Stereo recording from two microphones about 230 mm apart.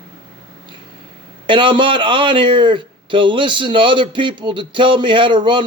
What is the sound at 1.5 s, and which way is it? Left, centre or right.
A man's voice, right.